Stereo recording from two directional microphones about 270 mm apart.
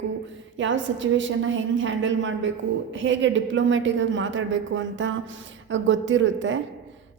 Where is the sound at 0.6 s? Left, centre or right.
Right.